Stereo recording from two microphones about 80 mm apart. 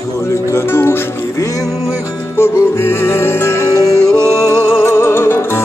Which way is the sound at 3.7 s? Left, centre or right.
Left.